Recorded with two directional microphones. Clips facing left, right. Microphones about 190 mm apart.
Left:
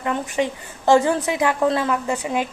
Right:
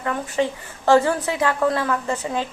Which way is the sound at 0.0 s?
15° left (ahead or behind).